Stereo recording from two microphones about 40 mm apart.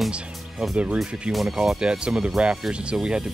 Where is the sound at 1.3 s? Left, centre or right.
Centre.